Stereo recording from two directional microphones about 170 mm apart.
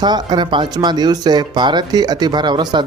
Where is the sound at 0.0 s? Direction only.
25° right (ahead or behind).